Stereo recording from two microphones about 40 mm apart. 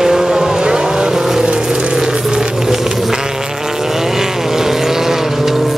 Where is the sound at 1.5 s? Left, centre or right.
Centre.